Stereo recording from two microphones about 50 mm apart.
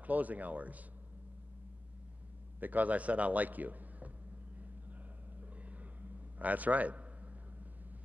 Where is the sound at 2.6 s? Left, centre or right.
Right.